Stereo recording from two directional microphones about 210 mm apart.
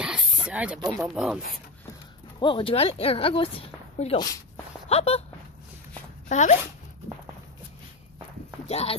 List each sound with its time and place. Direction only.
0.0 s snake: 5° right (ahead or behind)
0.7 s speech: 10° right (ahead or behind)
2.4 s speech: 25° left (ahead or behind)
6.2 s speech: 35° left (ahead or behind)
8.6 s speech: 30° left (ahead or behind)